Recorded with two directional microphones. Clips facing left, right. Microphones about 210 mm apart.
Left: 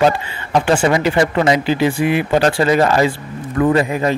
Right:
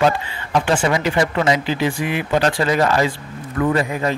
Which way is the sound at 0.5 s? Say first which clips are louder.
Left 4 dB; 40° left (ahead or behind).